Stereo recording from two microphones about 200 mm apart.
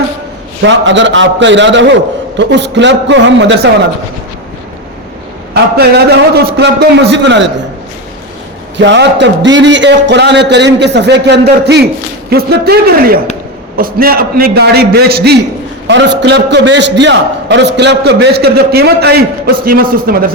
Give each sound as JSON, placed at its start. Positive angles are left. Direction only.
{"t": 0.6, "sound": "a man's voice", "side_deg": -65}
{"t": 5.7, "sound": "a man's voice", "side_deg": -55}
{"t": 8.8, "sound": "a man's voice", "side_deg": -60}